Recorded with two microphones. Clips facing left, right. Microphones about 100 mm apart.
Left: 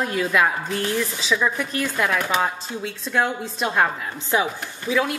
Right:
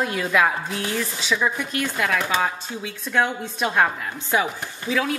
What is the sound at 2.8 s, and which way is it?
A woman's voice, centre (ahead or behind).